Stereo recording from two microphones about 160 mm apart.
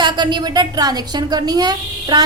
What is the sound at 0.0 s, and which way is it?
A woman's voice, 25° right (ahead or behind).